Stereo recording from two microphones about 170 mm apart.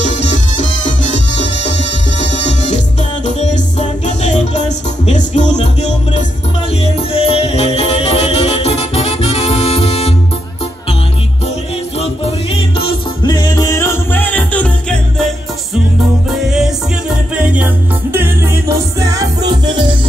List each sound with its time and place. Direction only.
0.0 s music: 45° left (ahead or behind)
12.0 s music: 35° left (ahead or behind); by 15.2 s 5° left (ahead or behind)
16.3 s music: 5° right (ahead or behind); by 20.0 s 25° right (ahead or behind)